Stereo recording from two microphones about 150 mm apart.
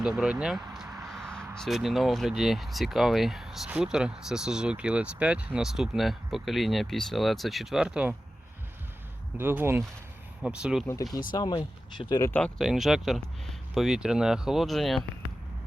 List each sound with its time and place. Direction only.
0.0 s speech: 5° right (ahead or behind)
9.4 s speech: 15° right (ahead or behind)
11.3 s speech: 30° left (ahead or behind)
12.3 s speech: 5° left (ahead or behind)